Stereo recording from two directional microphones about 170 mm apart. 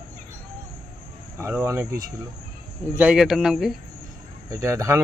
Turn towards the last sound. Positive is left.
turn(degrees=-15)  # may be behind; listen again after turning